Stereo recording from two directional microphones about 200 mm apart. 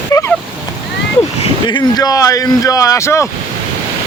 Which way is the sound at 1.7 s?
20° left (ahead or behind).